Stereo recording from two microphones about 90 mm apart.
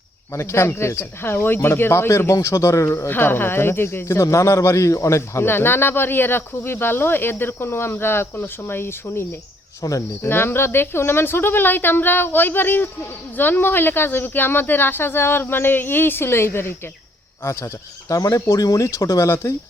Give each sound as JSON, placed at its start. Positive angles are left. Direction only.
{"t": 0.3, "sound": "speech", "side_deg": 30}
{"t": 3.1, "sound": "speech", "side_deg": 25}
{"t": 9.8, "sound": "speech", "side_deg": 40}
{"t": 10.2, "sound": "speech", "side_deg": 25}